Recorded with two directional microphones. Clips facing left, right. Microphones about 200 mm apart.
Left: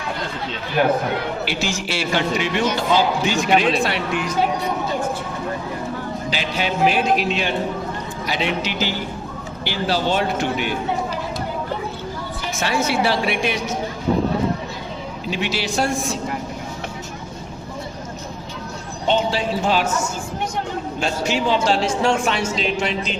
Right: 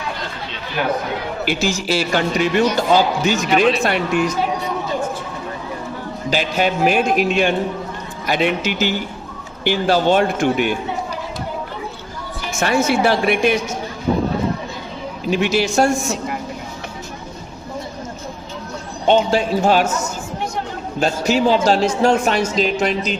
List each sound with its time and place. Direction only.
1.5 s a man's voice: 40° right (ahead or behind)
6.3 s a man's voice: 50° right (ahead or behind)
12.5 s a man's voice: 50° right (ahead or behind)
15.3 s a man's voice: 50° right (ahead or behind)
19.0 s a man's voice: 50° right (ahead or behind)